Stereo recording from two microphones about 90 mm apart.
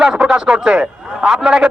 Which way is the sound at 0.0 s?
5° right (ahead or behind).